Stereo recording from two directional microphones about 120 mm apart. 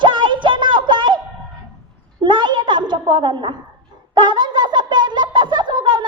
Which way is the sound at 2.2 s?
40° right (ahead or behind).